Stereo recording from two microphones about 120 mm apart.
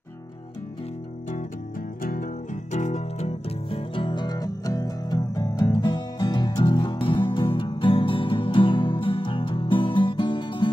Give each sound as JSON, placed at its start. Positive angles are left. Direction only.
{"t": 2.7, "sound": "music", "side_deg": 70}